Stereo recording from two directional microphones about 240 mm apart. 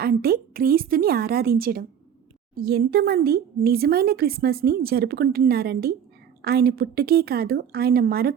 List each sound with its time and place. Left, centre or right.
0.0 s speech: right